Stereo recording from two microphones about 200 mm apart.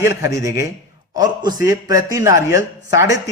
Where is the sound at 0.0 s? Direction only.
15° right (ahead or behind).